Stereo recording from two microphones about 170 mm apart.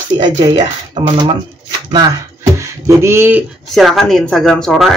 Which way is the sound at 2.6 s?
15° right (ahead or behind).